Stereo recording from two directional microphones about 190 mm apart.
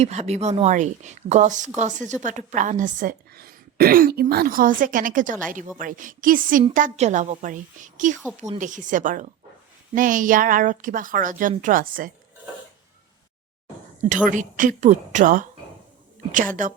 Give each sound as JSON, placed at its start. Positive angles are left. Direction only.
{"t": 0.0, "sound": "a woman's voice", "side_deg": -35}
{"t": 14.3, "sound": "a woman's voice", "side_deg": -45}